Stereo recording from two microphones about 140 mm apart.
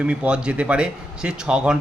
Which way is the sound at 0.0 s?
10° right (ahead or behind).